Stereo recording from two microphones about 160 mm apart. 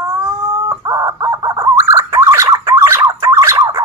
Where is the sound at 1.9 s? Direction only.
20° right (ahead or behind).